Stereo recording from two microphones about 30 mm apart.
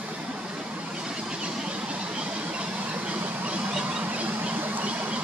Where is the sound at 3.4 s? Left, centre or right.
Right.